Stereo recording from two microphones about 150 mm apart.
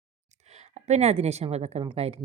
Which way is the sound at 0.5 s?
50° right (ahead or behind).